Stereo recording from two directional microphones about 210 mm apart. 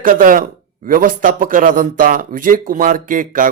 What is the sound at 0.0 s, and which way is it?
A man's voice, 40° right (ahead or behind).